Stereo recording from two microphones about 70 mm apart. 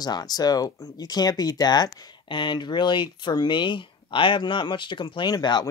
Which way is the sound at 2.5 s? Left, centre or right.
Left.